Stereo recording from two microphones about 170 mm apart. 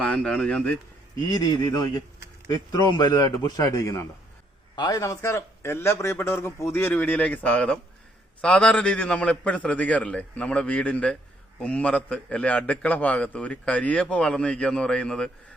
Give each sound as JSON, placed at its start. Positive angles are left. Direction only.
{"t": 0.0, "sound": "speech", "side_deg": 5}
{"t": 1.3, "sound": "a man's voice", "side_deg": 25}